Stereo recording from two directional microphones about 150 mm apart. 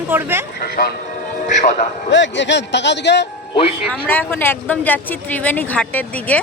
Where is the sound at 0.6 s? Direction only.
90° left.